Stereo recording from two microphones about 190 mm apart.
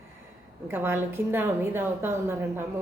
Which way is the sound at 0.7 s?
10° right (ahead or behind).